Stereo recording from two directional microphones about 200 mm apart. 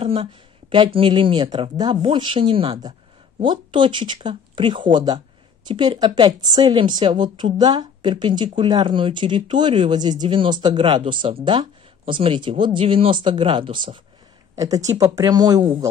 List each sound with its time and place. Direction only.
0.0 s speech: 30° right (ahead or behind)